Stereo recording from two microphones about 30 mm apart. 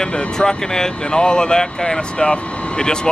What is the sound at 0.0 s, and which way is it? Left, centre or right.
Vehicle, left.